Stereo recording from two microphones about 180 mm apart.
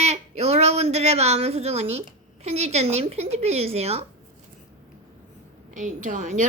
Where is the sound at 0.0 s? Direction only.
35° right (ahead or behind).